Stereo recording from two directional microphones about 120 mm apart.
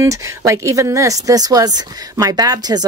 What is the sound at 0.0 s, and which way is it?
Speech, 25° right (ahead or behind).